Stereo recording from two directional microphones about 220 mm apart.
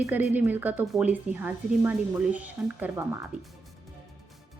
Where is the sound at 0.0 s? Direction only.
10° right (ahead or behind).